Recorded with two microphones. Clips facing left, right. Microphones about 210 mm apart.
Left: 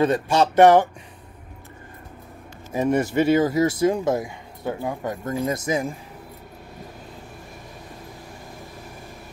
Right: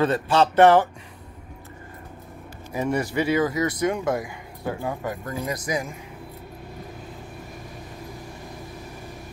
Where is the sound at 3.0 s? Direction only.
25° left (ahead or behind).